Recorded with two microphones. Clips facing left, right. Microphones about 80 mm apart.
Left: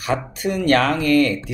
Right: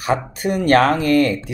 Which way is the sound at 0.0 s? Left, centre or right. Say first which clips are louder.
Right 2 dB; right.